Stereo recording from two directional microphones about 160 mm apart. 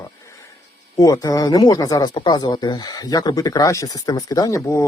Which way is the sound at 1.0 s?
20° left (ahead or behind).